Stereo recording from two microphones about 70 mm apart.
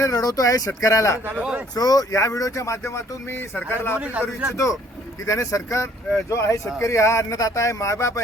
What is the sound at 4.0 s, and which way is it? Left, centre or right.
Speech, centre.